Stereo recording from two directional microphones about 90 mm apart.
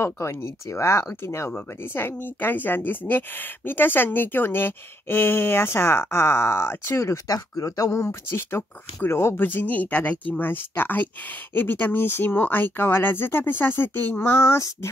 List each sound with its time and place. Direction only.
0.0 s speech: 30° left (ahead or behind)
7.2 s speech: 40° left (ahead or behind)